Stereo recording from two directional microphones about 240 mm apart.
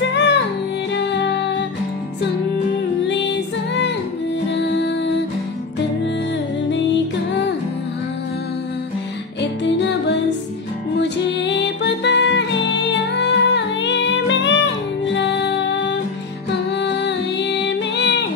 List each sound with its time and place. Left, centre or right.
0.0 s music: left
3.1 s music: left
6.7 s music: left
9.4 s music: left